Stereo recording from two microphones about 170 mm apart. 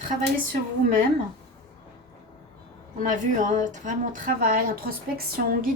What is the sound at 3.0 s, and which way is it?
Speech, 50° right (ahead or behind).